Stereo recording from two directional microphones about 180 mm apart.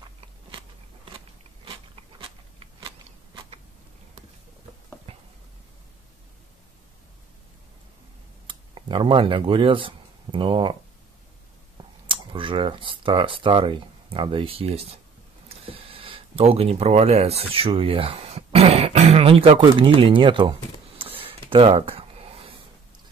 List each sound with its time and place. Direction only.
1.1 s biting: 30° right (ahead or behind)
8.5 s speech: 30° right (ahead or behind)
12.1 s speech: 30° right (ahead or behind)
21.0 s a sound: 30° right (ahead or behind)